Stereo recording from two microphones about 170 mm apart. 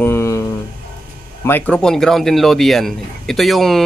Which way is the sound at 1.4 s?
10° left (ahead or behind).